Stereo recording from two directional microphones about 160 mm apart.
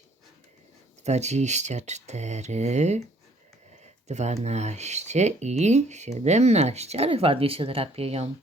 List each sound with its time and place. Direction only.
1.0 s speech: 45° right (ahead or behind)
4.1 s speech: 45° right (ahead or behind)